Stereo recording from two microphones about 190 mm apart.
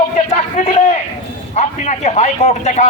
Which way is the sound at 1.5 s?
35° left (ahead or behind).